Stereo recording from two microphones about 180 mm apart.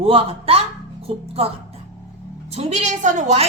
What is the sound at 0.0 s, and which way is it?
A woman's voice, 30° right (ahead or behind).